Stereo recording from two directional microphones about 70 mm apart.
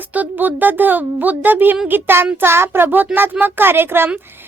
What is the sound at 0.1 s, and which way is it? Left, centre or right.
A child's voice, right.